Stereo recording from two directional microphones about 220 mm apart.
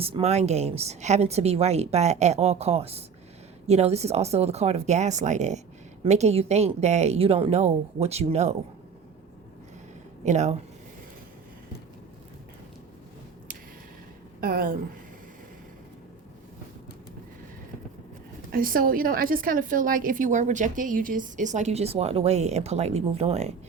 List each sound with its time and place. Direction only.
0.0 s a woman's voice: 25° right (ahead or behind)
10.2 s a woman's voice: 30° right (ahead or behind)
14.4 s a woman's voice: 40° right (ahead or behind)
18.5 s a woman's voice: 40° right (ahead or behind)